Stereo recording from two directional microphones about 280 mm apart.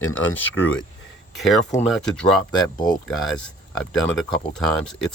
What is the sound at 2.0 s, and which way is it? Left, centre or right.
Speech, centre.